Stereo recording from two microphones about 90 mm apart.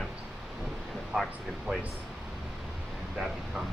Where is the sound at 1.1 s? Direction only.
5° right (ahead or behind).